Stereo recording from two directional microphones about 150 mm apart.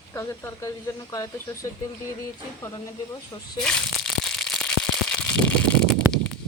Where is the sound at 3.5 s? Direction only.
5° left (ahead or behind).